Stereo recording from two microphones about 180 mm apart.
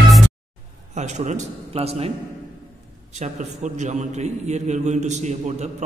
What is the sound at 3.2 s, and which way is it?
A man's voice, 40° right (ahead or behind).